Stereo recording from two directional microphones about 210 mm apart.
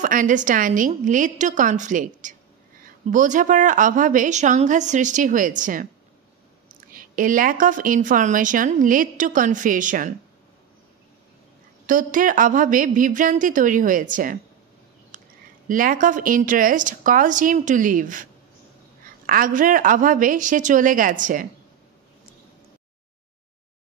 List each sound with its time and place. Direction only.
0.0 s speech: 40° right (ahead or behind)
6.9 s speech: 40° right (ahead or behind)
11.8 s speech: 40° right (ahead or behind)
15.7 s speech: 40° right (ahead or behind)